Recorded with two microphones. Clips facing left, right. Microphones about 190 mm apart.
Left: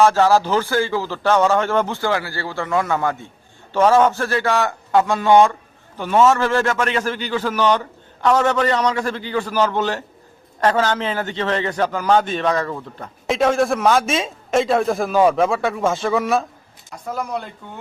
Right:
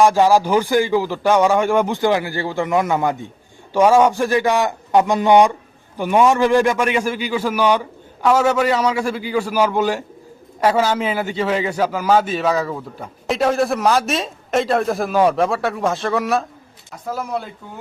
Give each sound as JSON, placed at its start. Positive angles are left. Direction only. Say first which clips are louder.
{"t": 0.0, "sound": "a man's voice", "louder": "right 1 dB", "side_deg": -15}